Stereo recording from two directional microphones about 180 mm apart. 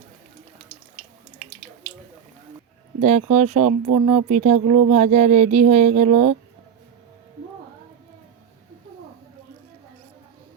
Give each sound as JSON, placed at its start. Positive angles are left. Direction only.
{"t": 3.0, "sound": "speech", "side_deg": -40}